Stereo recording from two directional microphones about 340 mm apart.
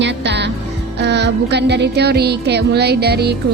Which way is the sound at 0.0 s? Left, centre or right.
Right.